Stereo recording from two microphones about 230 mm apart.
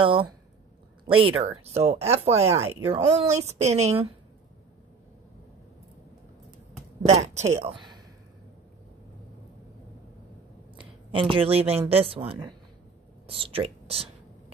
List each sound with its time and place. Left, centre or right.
0.0 s speech: right
7.1 s speech: right
10.8 s speech: right